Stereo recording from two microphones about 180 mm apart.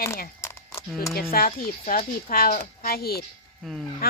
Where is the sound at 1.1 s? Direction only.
55° left (ahead or behind).